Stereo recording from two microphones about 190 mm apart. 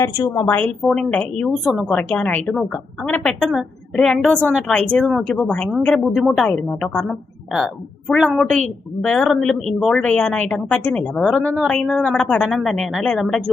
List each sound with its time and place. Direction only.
0.0 s a woman's voice: 15° left (ahead or behind); by 13.4 s centre (ahead or behind)